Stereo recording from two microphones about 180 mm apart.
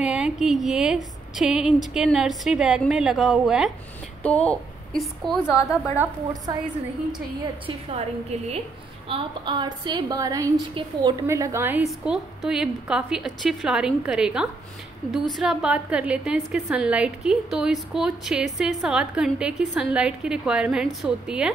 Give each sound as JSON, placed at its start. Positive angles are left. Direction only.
{"t": 0.0, "sound": "a woman's voice", "side_deg": -5}
{"t": 6.5, "sound": "a woman's voice", "side_deg": -20}
{"t": 7.6, "sound": "a woman's voice", "side_deg": -35}
{"t": 9.1, "sound": "a woman's voice", "side_deg": -25}
{"t": 10.7, "sound": "a woman's voice", "side_deg": -30}
{"t": 11.2, "sound": "a woman's voice", "side_deg": -15}
{"t": 11.9, "sound": "a woman's voice", "side_deg": 0}